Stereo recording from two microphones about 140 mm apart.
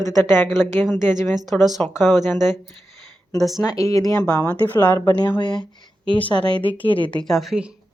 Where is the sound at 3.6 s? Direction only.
25° left (ahead or behind).